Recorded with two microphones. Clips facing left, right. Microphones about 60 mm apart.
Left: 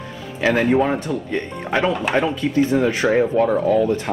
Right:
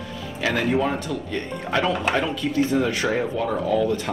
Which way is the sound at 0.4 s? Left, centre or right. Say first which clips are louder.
Left 5 dB; left.